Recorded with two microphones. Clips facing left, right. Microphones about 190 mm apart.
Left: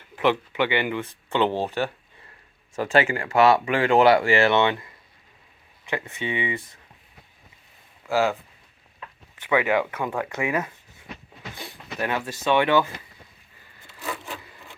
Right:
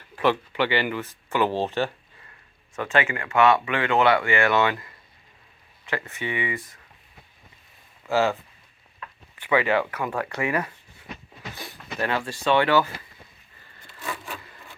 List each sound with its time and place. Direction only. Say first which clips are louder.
0.0 s speech: left 1 dB; 15° left (ahead or behind)
2.7 s speech: left 3 dB; 30° left (ahead or behind)
9.5 s speech: even; 10° left (ahead or behind)